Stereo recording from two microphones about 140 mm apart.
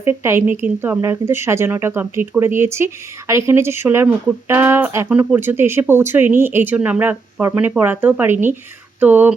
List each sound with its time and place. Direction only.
0.0 s speech: 15° right (ahead or behind)